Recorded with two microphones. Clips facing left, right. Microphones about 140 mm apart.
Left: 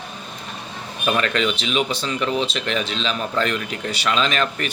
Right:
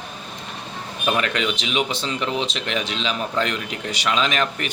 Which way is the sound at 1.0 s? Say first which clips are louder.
Left 2 dB; 10° right (ahead or behind).